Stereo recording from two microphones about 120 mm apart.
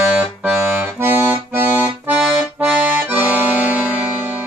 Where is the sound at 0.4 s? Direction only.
15° right (ahead or behind).